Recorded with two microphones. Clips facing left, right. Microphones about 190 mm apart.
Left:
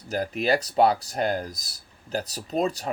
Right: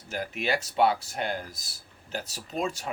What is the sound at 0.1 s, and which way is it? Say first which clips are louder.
Speech: left 6 dB; 35° left (ahead or behind).